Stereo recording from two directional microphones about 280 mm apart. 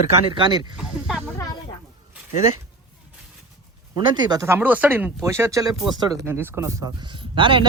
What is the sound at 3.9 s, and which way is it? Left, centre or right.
Speech, centre.